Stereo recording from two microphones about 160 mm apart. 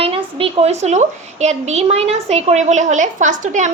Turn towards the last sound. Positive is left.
turn(degrees=-50)  # may be behind; listen again after turning